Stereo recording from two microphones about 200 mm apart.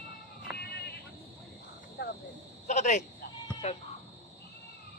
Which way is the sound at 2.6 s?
35° left (ahead or behind).